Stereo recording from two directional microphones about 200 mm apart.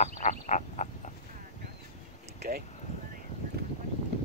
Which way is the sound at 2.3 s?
50° right (ahead or behind).